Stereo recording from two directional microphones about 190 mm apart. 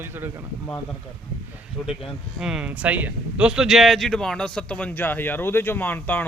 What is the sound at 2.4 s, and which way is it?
A man's voice, 5° right (ahead or behind).